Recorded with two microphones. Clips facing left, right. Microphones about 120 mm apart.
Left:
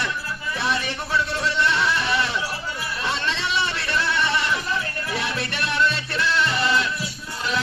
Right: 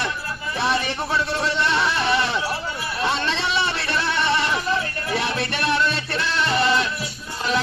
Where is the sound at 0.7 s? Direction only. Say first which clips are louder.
Right 1 dB; 25° right (ahead or behind).